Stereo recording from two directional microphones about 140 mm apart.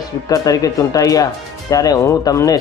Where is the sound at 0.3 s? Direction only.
25° left (ahead or behind).